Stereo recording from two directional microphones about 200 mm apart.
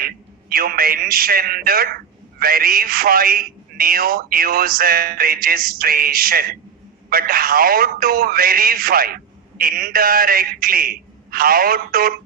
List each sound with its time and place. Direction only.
0.5 s speech: 45° right (ahead or behind)